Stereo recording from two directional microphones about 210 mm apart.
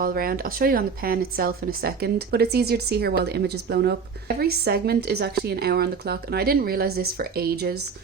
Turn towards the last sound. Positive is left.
turn(degrees=-45)  # may be behind; listen again after turning